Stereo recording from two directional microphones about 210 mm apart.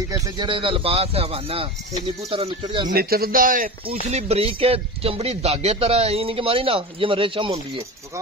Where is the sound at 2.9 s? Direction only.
45° right (ahead or behind).